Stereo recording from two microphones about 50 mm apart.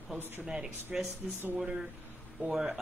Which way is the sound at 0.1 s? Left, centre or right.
Centre.